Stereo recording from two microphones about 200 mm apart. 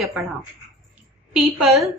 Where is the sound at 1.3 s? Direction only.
5° right (ahead or behind).